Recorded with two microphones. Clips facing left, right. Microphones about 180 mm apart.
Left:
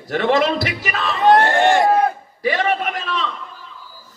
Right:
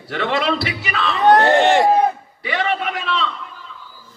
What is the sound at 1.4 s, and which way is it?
Speech, 20° right (ahead or behind).